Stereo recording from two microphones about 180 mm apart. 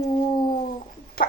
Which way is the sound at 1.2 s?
55° left (ahead or behind).